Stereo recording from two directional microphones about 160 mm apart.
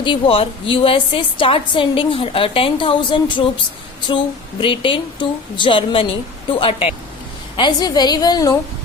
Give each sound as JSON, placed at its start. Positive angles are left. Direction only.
{"t": 0.0, "sound": "a woman's voice", "side_deg": 35}
{"t": 4.6, "sound": "a woman's voice", "side_deg": 30}